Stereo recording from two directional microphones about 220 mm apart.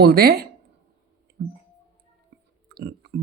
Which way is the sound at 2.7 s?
45° right (ahead or behind).